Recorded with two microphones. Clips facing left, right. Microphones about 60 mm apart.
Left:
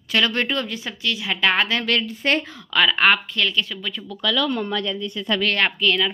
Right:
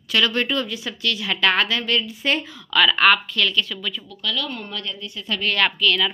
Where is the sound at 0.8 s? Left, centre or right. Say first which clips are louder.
Right 1 dB; centre.